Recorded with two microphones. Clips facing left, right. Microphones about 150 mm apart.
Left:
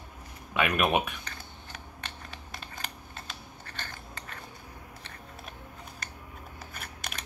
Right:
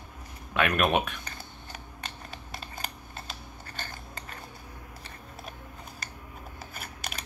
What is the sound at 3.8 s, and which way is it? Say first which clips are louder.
Cutlery: right 1 dB; 35° right (ahead or behind).